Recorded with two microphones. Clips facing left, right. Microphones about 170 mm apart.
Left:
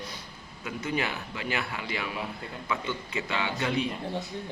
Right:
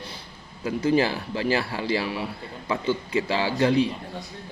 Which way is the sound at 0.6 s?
30° right (ahead or behind).